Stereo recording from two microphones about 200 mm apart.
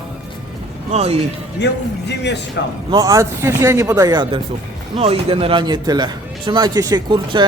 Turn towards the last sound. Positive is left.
turn(degrees=-20)  # may be behind; listen again after turning